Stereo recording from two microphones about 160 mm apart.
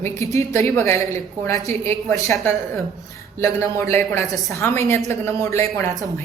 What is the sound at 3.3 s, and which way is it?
A woman's voice, 15° left (ahead or behind).